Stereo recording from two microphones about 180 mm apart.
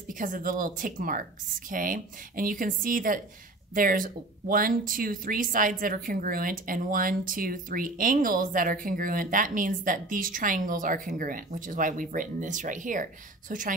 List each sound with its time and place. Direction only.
0.2 s speech: 50° right (ahead or behind)